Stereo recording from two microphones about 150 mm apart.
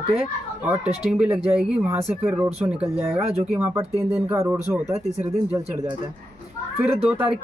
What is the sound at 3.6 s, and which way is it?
Speech, 15° right (ahead or behind).